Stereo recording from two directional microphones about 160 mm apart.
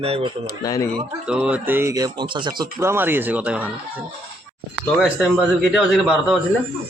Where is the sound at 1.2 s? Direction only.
5° right (ahead or behind); by 2.7 s 30° right (ahead or behind).